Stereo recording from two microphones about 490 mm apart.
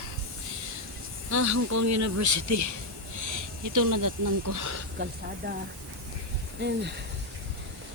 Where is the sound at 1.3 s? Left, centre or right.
Right.